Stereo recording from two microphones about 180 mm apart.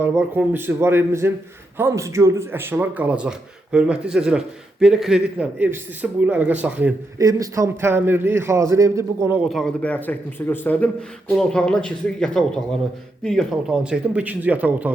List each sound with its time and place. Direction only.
0.0 s speech: 10° right (ahead or behind)
9.4 s a man's voice: centre (ahead or behind)